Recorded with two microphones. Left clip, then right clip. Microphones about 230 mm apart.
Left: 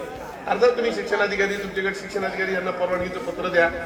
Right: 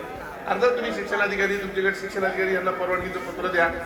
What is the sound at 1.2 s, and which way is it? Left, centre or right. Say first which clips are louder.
Speech: right 2 dB; left.